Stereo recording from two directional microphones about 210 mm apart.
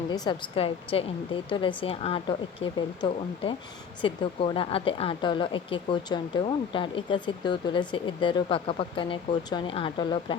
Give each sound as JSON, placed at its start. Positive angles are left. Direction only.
{"t": 0.1, "sound": "speech", "side_deg": 25}